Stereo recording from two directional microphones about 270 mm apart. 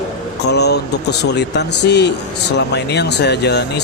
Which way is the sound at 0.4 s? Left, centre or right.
Left.